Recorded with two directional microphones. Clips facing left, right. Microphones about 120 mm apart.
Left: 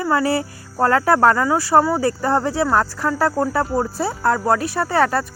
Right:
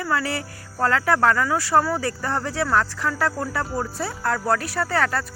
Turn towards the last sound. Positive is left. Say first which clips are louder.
# left 5 dB
turn(degrees=25)  # may be behind; listen again after turning